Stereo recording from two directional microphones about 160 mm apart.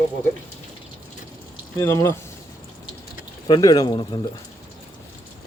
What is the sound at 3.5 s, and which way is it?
Speech, 25° left (ahead or behind).